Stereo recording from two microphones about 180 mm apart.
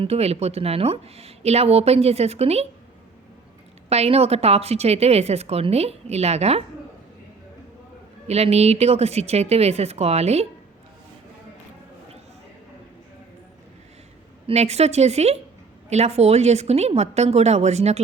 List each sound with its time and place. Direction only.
0.0 s a woman's voice: 35° right (ahead or behind)
3.8 s a woman's voice: 35° right (ahead or behind)
8.3 s a woman's voice: 35° right (ahead or behind)
14.4 s a woman's voice: 35° right (ahead or behind)